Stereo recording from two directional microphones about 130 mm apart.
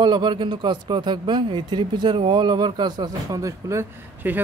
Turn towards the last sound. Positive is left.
turn(degrees=-15)  # may be behind; listen again after turning